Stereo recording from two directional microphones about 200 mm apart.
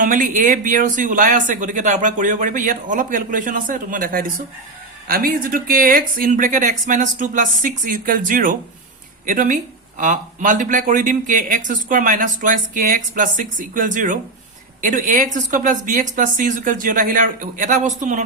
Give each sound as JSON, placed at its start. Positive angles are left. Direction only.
{"t": 0.0, "sound": "speech", "side_deg": -40}